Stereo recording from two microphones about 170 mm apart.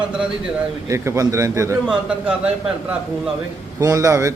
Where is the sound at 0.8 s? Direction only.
15° right (ahead or behind).